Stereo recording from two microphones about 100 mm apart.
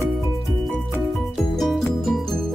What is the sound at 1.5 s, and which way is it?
Music, centre (ahead or behind).